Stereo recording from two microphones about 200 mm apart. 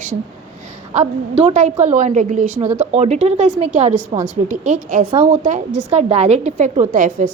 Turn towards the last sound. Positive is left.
turn(degrees=-40)  # may be behind; listen again after turning